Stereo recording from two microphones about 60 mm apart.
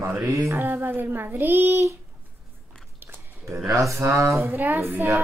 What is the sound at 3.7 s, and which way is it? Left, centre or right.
Speech, right.